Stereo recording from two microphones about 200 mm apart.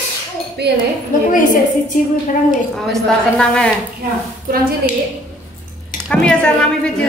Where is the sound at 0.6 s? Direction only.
55° right (ahead or behind).